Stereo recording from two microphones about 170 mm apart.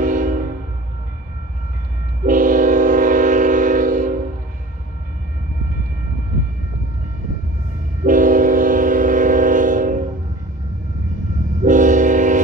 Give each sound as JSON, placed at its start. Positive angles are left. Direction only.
{"t": 0.0, "sound": "train", "side_deg": -50}
{"t": 2.2, "sound": "train", "side_deg": -50}
{"t": 8.0, "sound": "train", "side_deg": -50}
{"t": 11.6, "sound": "train", "side_deg": -50}